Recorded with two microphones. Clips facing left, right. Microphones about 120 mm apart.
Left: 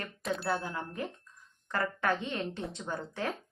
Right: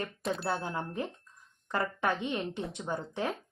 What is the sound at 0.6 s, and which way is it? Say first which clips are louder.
A woman's voice: right 2 dB; 25° right (ahead or behind).